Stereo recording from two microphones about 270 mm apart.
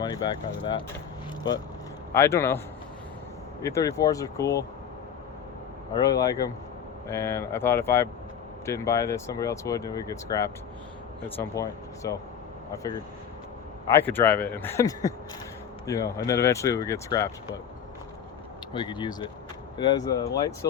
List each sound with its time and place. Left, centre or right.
0.0 s speech: centre
2.1 s speech: centre
3.6 s speech: centre
5.9 s speech: centre
18.7 s speech: centre